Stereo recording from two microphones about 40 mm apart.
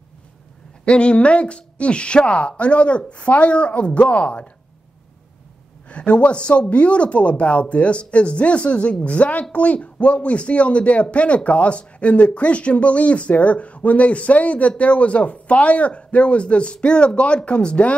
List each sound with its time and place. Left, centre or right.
0.8 s speech: left
5.9 s speech: left